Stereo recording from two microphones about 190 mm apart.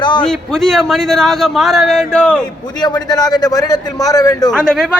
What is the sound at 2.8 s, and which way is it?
A man's voice, 20° left (ahead or behind).